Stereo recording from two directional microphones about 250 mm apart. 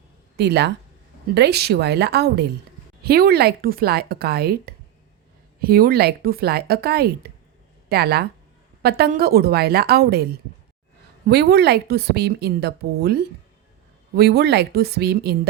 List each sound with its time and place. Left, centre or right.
0.3 s a woman's voice: right